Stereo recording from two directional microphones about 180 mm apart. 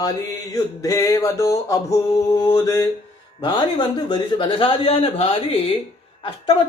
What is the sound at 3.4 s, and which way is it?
A man's voice, 25° left (ahead or behind).